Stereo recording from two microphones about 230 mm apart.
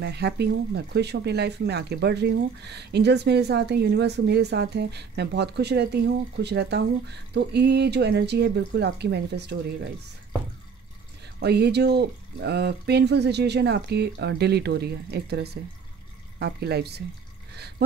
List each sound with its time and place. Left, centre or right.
0.0 s speech: right
11.3 s speech: right